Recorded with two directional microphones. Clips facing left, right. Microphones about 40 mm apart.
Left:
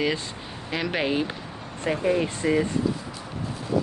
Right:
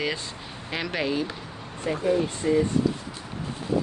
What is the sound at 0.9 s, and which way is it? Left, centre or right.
Speech, left.